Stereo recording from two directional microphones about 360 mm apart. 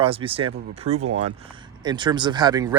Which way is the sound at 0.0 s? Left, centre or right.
Centre.